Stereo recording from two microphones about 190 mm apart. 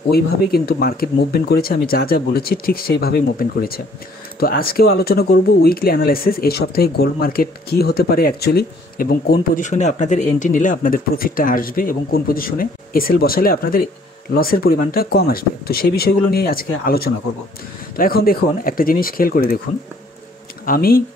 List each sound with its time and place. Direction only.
0.1 s speech: 55° left (ahead or behind)
20.6 s speech: 50° left (ahead or behind)